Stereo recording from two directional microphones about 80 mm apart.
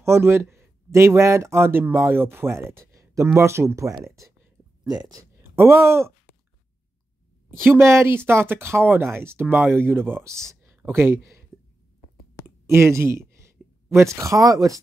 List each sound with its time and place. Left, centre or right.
0.0 s speech: right
4.8 s speech: right
5.4 s speech: right
7.6 s speech: right
10.5 s a sound: right
10.9 s speech: right
12.4 s speech: right